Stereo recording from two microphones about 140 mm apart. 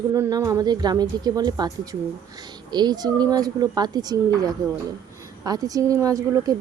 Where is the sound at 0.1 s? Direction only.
25° right (ahead or behind).